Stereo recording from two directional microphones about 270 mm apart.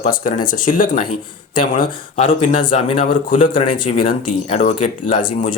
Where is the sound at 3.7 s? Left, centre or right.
Left.